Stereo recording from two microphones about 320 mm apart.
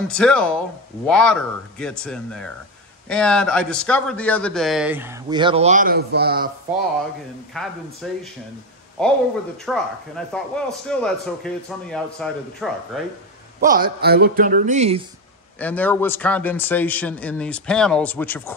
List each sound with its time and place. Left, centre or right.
0.1 s a man's voice: centre; by 6.5 s right
7.5 s a man's voice: centre
13.6 s speech: right
15.6 s a man's voice: centre